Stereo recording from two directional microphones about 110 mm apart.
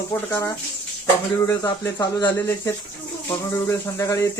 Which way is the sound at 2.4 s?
25° left (ahead or behind).